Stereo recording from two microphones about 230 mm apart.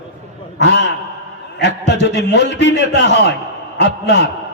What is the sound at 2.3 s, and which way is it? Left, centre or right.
A man's voice, left.